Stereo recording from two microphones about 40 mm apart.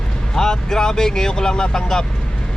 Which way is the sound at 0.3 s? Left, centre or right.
Centre.